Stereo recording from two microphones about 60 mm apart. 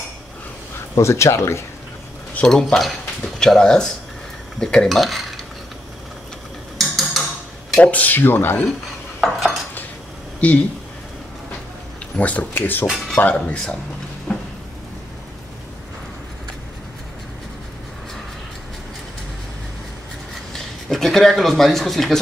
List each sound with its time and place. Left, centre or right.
0.9 s speech: left
2.4 s dishes: centre
3.3 s speech: centre
4.6 s dishes: centre
6.8 s tick-tock: centre
7.8 s speech: left
9.2 s cutlery: centre
10.4 s speech: left
12.2 s speech: left
13.2 s speech: left
14.3 s cupboard open or close: centre
20.5 s speech: centre